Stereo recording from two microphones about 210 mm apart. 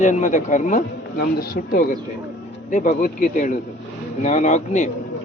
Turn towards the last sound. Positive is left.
turn(degrees=35)  # may be behind; listen again after turning